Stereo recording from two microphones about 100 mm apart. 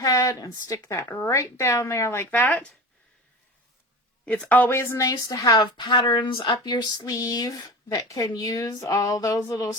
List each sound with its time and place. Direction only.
0.0 s a woman's voice: 40° left (ahead or behind); by 2.7 s 15° left (ahead or behind)
4.4 s a woman's voice: 15° left (ahead or behind); by 9.7 s 35° left (ahead or behind)